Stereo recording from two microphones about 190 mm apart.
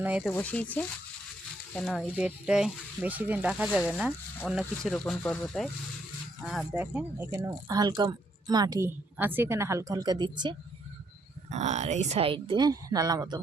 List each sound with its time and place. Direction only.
0.0 s speech: 5° right (ahead or behind)
0.3 s speech: 5° left (ahead or behind)
7.3 s a woman's voice: 20° right (ahead or behind)
11.5 s a woman's voice: 35° right (ahead or behind); by 13.4 s 20° right (ahead or behind)